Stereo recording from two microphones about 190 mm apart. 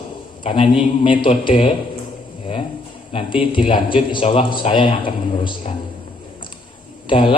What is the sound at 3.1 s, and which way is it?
A man's voice, 25° left (ahead or behind).